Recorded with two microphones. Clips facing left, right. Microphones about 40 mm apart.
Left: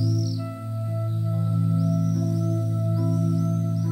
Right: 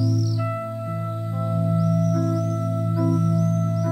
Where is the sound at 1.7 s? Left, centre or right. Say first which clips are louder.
Right 4 dB; centre.